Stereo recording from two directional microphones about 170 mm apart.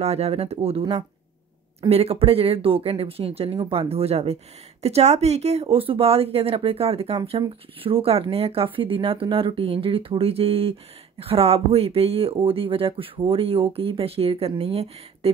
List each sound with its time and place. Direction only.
0.0 s speech: 40° right (ahead or behind)